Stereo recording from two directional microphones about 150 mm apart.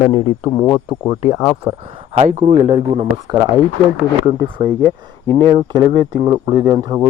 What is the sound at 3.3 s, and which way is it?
Speech, 25° right (ahead or behind).